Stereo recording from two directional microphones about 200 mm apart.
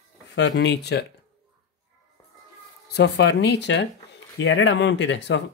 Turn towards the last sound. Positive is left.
turn(degrees=65)  # may be behind; listen again after turning